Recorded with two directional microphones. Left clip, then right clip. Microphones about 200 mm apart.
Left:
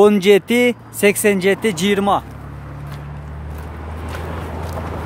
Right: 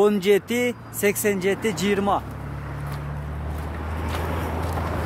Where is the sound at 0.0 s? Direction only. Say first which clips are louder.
Left 7 dB; 30° left (ahead or behind).